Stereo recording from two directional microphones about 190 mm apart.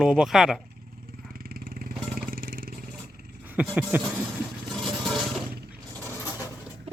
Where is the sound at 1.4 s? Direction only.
50° right (ahead or behind).